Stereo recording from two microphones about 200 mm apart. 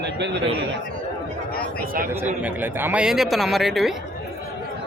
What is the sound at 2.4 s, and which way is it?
Speech, 10° right (ahead or behind).